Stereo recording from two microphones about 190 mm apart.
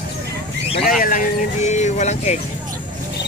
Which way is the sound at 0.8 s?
50° left (ahead or behind).